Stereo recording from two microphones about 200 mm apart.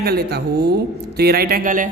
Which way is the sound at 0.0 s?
50° right (ahead or behind).